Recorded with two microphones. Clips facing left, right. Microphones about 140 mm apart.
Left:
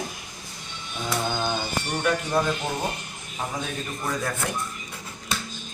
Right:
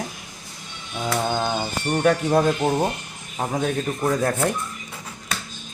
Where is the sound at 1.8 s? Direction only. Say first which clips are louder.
Right 8 dB; 45° right (ahead or behind).